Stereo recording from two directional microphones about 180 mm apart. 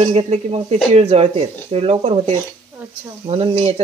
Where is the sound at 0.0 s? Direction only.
35° right (ahead or behind).